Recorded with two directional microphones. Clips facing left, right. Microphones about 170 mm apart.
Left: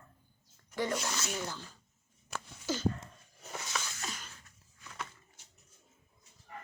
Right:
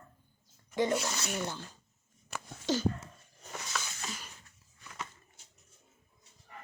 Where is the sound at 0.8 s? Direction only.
15° right (ahead or behind).